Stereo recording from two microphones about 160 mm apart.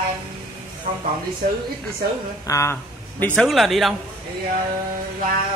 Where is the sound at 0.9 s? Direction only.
50° right (ahead or behind).